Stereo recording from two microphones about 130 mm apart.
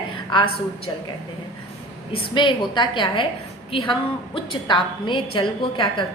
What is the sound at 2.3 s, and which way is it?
A woman's voice, 35° left (ahead or behind).